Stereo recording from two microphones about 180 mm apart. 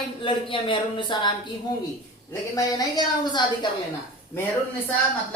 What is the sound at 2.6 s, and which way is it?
A woman's voice, 20° left (ahead or behind).